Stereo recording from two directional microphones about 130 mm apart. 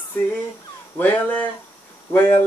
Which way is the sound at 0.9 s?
15° left (ahead or behind).